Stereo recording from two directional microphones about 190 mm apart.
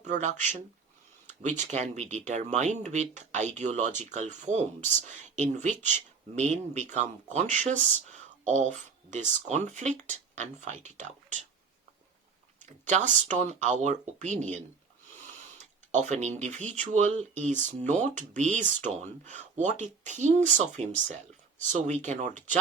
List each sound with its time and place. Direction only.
0.0 s speech: 40° right (ahead or behind)
12.8 s speech: 40° right (ahead or behind)